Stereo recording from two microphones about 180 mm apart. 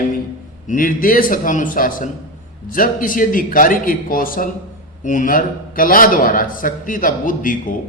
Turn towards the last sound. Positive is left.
turn(degrees=50)  # may be behind; listen again after turning